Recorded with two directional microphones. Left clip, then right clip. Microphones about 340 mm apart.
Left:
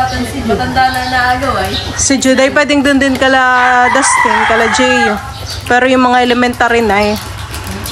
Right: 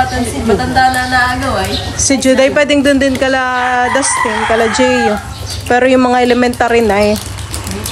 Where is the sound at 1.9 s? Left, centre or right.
Centre.